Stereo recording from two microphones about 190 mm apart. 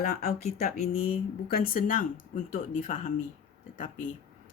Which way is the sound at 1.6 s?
45° left (ahead or behind).